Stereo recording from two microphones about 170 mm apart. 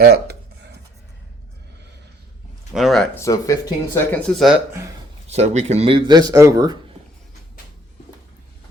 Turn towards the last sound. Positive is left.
turn(degrees=-20)  # may be behind; listen again after turning